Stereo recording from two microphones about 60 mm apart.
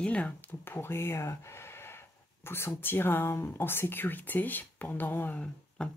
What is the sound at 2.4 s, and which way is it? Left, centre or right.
Speech, left.